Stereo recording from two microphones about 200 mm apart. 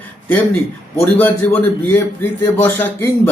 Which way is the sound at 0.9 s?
10° left (ahead or behind).